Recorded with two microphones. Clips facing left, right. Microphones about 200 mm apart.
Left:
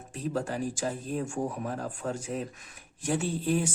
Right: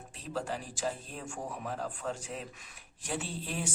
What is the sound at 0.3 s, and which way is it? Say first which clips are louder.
Speech: left 4 dB; 45° left (ahead or behind).